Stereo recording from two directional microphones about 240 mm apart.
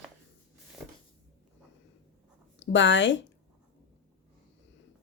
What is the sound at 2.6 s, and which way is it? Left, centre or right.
Speech, left.